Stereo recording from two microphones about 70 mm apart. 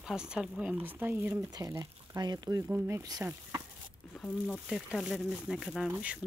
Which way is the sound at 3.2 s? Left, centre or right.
Right.